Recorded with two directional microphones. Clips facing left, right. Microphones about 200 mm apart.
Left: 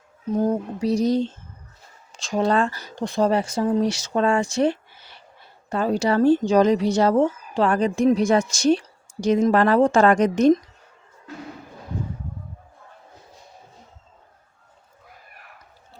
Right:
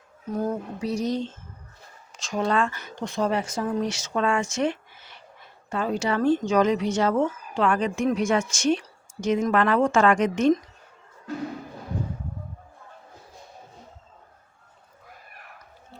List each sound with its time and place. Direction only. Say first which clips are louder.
0.3 s speech: left 6 dB; 25° left (ahead or behind)
0.8 s speech: left 7 dB; 35° left (ahead or behind)